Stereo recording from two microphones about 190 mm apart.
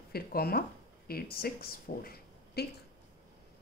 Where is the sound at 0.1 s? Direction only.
55° left (ahead or behind).